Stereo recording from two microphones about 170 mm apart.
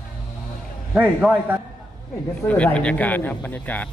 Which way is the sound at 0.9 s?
10° right (ahead or behind).